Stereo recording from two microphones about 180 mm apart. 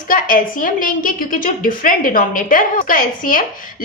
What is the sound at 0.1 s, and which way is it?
A woman's voice, 50° left (ahead or behind).